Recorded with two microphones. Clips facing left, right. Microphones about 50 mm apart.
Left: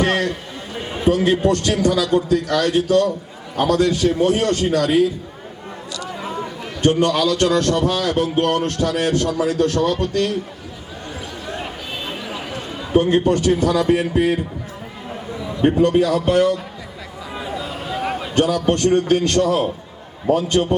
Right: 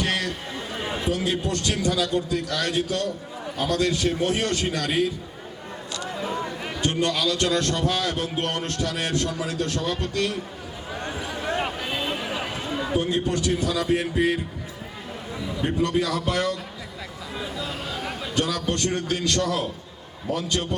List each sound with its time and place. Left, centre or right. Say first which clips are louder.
0.0 s a man's voice: left 7 dB; left
6.1 s chatter: left 1 dB; centre
6.8 s a man's voice: left 8 dB; left
11.0 s a sound: right 1 dB; right; by 12.9 s centre
12.9 s a man's voice: left 10 dB; left
15.3 s a sound: left 3 dB; centre
15.6 s a man's voice: left 9 dB; left
17.6 s a sound: left 3 dB; centre
17.9 s basketball bounce: left 8 dB; left
18.3 s a man's voice: left 8 dB; left